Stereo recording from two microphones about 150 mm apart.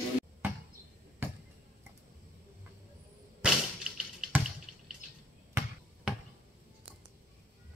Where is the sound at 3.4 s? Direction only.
5° right (ahead or behind).